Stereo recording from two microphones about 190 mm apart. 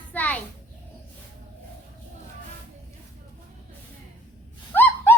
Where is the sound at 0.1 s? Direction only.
10° left (ahead or behind).